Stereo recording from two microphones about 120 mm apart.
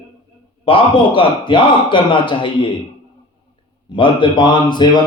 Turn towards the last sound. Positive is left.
turn(degrees=40)  # may be behind; listen again after turning